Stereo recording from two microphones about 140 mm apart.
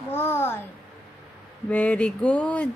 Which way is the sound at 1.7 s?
10° left (ahead or behind).